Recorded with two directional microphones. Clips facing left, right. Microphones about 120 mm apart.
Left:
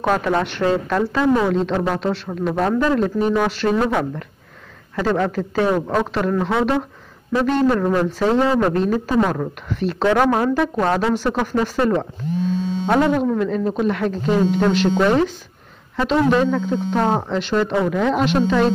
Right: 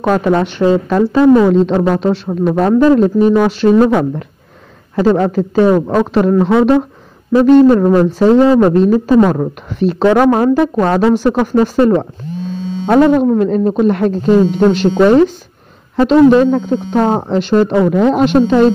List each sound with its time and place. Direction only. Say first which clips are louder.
0.0 s speech: right 6 dB; 25° right (ahead or behind)
1.2 s speech: right 10 dB; 30° right (ahead or behind)
17.4 s speech: right 8 dB; 40° right (ahead or behind)